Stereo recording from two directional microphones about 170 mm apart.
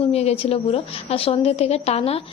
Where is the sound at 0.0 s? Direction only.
40° left (ahead or behind).